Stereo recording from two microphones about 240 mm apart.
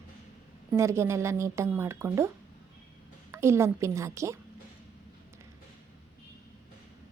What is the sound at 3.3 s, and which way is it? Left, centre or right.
A woman's voice, centre.